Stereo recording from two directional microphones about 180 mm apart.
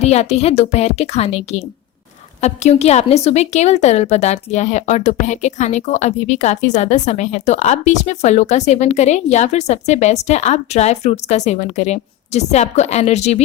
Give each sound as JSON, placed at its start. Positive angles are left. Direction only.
{"t": 0.0, "sound": "a woman's voice", "side_deg": 35}